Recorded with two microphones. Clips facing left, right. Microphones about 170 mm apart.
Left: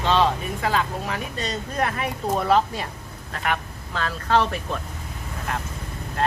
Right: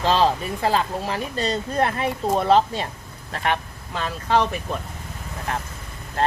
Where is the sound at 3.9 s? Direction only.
15° right (ahead or behind).